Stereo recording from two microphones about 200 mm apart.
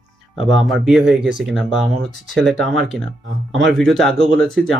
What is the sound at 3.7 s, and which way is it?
Speech, centre (ahead or behind).